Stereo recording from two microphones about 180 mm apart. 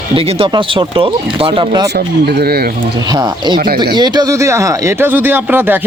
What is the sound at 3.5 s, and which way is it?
Speech, 55° right (ahead or behind).